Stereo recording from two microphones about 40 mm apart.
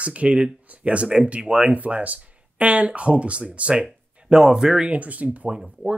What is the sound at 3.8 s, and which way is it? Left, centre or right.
Speech, centre.